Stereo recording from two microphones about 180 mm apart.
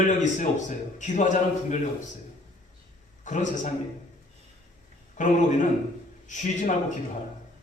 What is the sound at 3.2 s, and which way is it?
Speech, 45° left (ahead or behind).